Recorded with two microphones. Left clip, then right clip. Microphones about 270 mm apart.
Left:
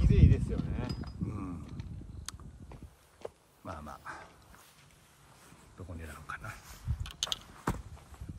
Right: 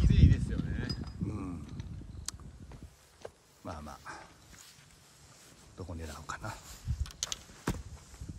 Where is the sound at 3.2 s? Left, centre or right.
Left.